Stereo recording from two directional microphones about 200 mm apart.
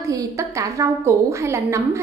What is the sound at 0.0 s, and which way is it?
A woman's voice, 15° right (ahead or behind).